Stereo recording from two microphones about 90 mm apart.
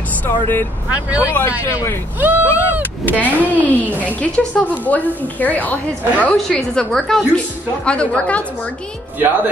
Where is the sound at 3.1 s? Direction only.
15° left (ahead or behind).